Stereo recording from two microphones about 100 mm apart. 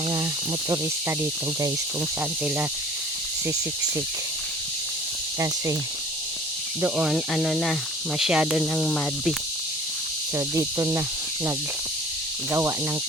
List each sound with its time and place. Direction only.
6.9 s speech: 5° right (ahead or behind)
10.3 s cricket: 30° right (ahead or behind)
12.5 s cricket: 30° right (ahead or behind)